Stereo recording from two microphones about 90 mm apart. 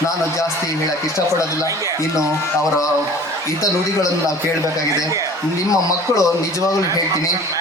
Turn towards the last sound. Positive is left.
turn(degrees=40)  # may be behind; listen again after turning